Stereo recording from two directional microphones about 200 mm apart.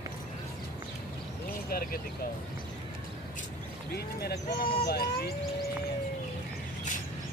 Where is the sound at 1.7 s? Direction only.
45° left (ahead or behind).